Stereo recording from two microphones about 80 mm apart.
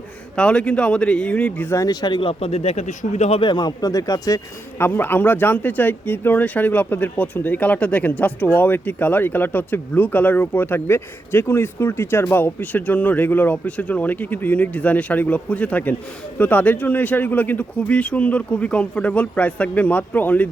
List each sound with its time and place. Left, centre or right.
0.3 s speech: centre
1.7 s speech: left
3.4 s speech: left
4.8 s speech: left